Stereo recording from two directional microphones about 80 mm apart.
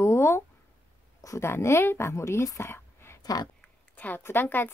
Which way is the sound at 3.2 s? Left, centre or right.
Left.